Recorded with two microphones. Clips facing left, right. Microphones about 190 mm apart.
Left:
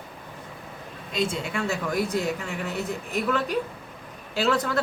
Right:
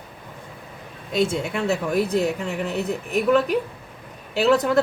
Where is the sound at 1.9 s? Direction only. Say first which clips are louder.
Right 4 dB; 25° right (ahead or behind).